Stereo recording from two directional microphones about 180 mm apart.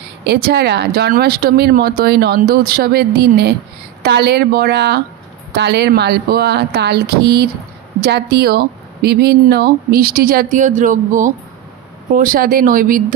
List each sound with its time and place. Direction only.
0.3 s speech: 65° right (ahead or behind)